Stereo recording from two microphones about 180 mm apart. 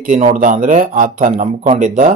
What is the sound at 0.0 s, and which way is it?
A man's voice, 40° right (ahead or behind).